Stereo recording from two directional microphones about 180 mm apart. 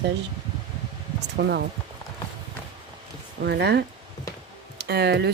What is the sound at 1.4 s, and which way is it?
Speech, 60° right (ahead or behind).